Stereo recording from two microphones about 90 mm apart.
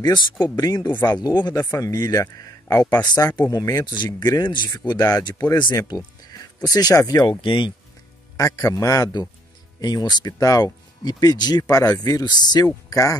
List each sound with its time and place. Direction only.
0.0 s speech: 55° left (ahead or behind)
0.6 s speech: 40° left (ahead or behind)
1.6 s speech: 35° left (ahead or behind)
3.8 s speech: 55° left (ahead or behind); by 7.2 s 40° left (ahead or behind)
7.2 s speech: 65° left (ahead or behind)
8.4 s speech: 40° left (ahead or behind)